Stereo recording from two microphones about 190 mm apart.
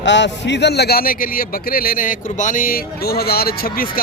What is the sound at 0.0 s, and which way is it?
A man's voice, 70° left (ahead or behind).